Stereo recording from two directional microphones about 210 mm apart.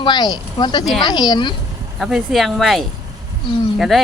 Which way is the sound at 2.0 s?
Centre (ahead or behind).